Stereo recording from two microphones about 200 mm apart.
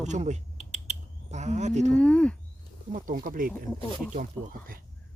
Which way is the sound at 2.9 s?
40° right (ahead or behind).